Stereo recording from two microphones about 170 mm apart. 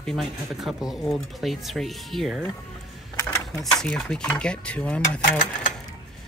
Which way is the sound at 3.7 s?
Centre (ahead or behind).